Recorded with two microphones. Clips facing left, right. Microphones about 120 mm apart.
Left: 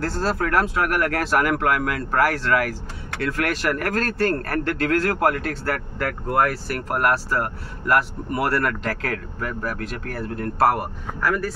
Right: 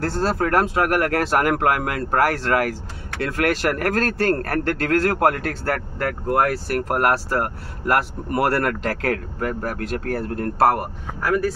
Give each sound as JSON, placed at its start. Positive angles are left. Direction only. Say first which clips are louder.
{"t": 0.0, "sound": "speech", "louder": "right 2 dB", "side_deg": -50}
{"t": 6.5, "sound": "speech", "louder": "right 4 dB", "side_deg": -55}